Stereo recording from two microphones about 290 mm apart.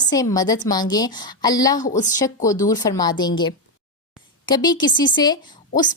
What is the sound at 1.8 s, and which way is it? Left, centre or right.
Speech, left.